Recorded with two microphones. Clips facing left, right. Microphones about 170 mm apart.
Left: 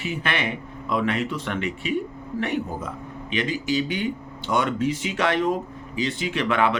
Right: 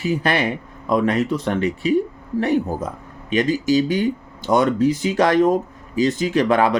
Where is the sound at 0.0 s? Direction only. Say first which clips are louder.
Right 7 dB; 35° right (ahead or behind).